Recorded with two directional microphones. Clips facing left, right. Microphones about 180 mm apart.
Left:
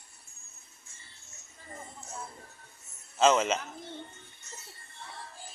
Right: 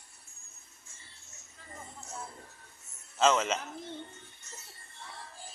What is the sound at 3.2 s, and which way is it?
Speech, 10° left (ahead or behind).